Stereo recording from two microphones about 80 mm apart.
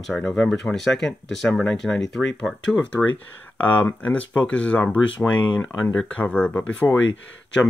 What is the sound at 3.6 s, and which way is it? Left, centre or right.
Speech, left.